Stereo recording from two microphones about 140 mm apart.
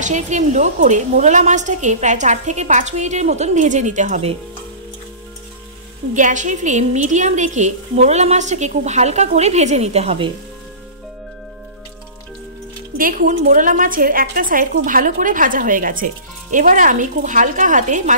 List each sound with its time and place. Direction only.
0.0 s a woman's voice: 60° right (ahead or behind)
6.1 s a woman's voice: 60° right (ahead or behind); by 10.3 s 45° right (ahead or behind)
12.9 s a woman's voice: 80° right; by 18.1 s 65° right (ahead or behind)